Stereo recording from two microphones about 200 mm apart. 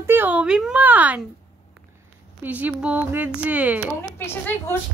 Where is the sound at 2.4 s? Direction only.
10° right (ahead or behind).